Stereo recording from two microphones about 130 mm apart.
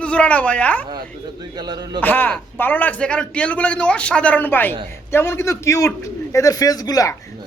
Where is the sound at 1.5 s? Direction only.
30° right (ahead or behind).